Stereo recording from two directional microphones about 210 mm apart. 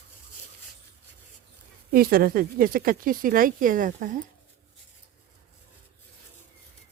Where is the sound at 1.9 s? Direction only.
45° right (ahead or behind).